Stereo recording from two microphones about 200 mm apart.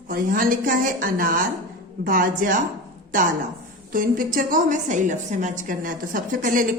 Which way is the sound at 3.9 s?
45° right (ahead or behind).